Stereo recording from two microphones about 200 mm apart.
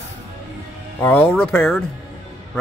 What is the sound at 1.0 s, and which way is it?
Speech, 5° left (ahead or behind).